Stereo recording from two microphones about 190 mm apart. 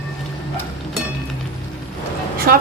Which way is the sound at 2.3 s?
50° right (ahead or behind).